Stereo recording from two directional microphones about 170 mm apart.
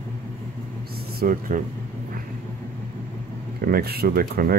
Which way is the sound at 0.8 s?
65° right (ahead or behind).